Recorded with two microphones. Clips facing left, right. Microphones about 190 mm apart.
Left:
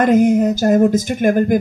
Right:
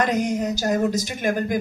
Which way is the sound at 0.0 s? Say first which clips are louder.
Left 10 dB; 50° left (ahead or behind).